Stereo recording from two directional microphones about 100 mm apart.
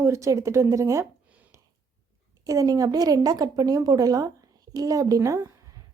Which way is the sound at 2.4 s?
35° right (ahead or behind).